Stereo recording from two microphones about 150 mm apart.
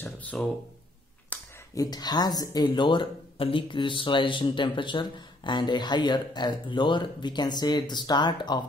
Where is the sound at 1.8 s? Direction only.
25° left (ahead or behind).